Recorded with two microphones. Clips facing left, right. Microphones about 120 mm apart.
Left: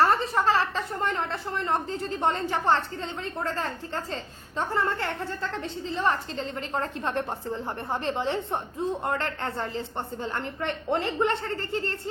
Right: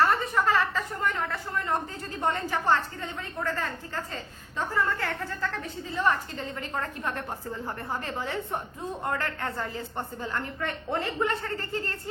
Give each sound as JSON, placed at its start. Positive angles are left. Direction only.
{"t": 0.0, "sound": "a woman's voice", "side_deg": 30}